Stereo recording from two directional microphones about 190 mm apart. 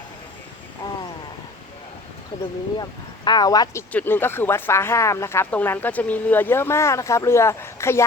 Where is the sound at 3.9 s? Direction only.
10° left (ahead or behind).